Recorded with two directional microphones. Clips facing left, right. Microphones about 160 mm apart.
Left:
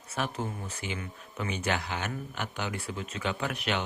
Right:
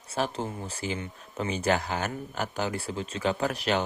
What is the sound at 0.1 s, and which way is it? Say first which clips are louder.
Speech: right 3 dB; 30° right (ahead or behind).